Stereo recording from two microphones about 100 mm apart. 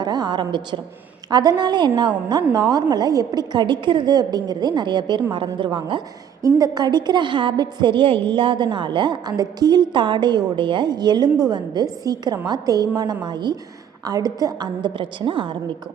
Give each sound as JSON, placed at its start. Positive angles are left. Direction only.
{"t": 0.0, "sound": "a woman's voice", "side_deg": -40}
{"t": 6.4, "sound": "a woman's voice", "side_deg": -40}